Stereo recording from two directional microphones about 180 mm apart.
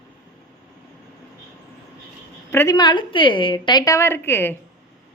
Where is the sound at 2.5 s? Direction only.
20° left (ahead or behind).